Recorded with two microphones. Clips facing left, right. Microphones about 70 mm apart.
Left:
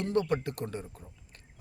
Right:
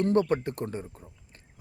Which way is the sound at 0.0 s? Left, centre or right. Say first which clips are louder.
Right 5 dB; right.